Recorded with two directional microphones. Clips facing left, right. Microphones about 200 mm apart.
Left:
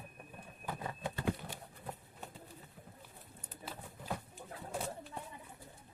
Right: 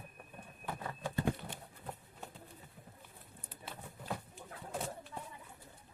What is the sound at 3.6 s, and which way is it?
Patter, centre (ahead or behind).